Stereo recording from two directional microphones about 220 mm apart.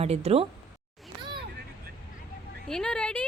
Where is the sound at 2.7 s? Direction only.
5° left (ahead or behind).